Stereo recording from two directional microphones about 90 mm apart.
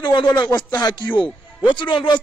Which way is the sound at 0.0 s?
60° left (ahead or behind).